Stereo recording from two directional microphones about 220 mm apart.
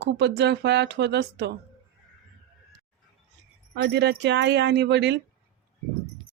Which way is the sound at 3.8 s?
50° right (ahead or behind).